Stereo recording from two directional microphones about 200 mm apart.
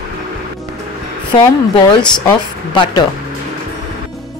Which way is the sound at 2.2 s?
20° left (ahead or behind).